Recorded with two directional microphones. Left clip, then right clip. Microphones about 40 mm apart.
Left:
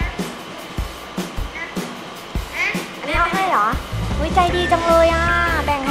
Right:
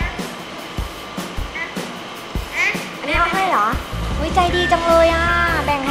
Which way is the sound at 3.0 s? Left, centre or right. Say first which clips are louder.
Right 1 dB; centre.